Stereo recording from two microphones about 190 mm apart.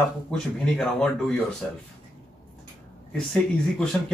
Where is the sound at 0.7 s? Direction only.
5° left (ahead or behind).